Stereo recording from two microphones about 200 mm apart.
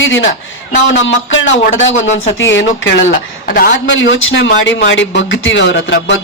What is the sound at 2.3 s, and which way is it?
Speech, 70° left (ahead or behind).